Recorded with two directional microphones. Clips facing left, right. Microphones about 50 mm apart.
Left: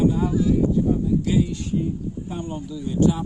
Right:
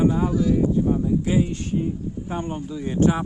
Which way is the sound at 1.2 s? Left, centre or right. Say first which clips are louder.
Even; right.